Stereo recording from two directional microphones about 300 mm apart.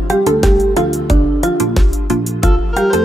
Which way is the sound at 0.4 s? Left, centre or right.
Centre.